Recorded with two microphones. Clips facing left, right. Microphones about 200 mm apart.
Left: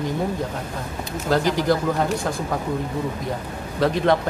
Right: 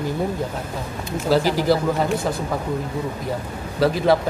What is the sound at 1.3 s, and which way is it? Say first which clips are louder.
Speech: right 2 dB; 5° right (ahead or behind).